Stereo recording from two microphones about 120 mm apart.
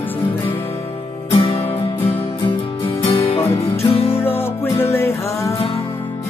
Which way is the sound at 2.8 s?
50° left (ahead or behind).